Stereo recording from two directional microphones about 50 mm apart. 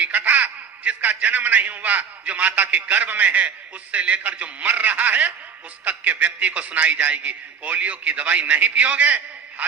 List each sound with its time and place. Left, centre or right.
0.0 s a man's voice: right